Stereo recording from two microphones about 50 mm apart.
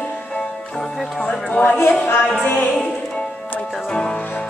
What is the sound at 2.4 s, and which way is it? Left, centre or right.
Music, left.